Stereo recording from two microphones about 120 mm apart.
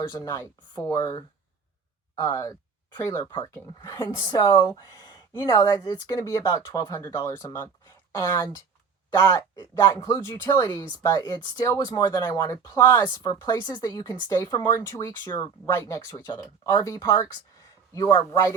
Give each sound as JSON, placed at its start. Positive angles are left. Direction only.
{"t": 0.1, "sound": "speech", "side_deg": 30}
{"t": 4.3, "sound": "speech", "side_deg": 35}
{"t": 18.3, "sound": "speech", "side_deg": 25}